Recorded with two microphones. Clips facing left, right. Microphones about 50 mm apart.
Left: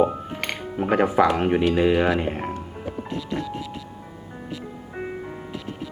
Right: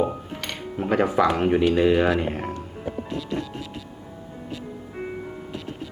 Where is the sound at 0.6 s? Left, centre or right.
Centre.